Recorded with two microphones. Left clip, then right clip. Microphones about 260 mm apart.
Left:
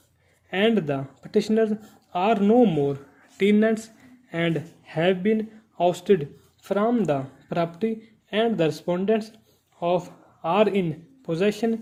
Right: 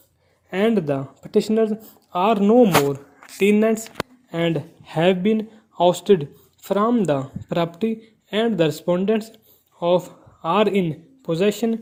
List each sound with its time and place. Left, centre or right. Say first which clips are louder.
0.5 s speech: right 2 dB; centre
4.8 s a man's voice: right 4 dB; right